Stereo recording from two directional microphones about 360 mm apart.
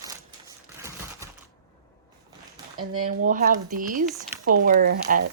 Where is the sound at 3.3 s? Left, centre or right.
Right.